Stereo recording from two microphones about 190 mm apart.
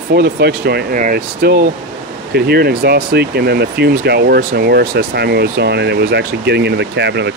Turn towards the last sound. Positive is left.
turn(degrees=-65)  # may be behind; listen again after turning